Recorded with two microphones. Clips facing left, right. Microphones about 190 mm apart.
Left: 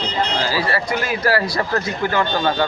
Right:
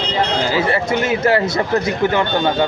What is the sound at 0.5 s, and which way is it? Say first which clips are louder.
Speech: right 4 dB; 20° right (ahead or behind).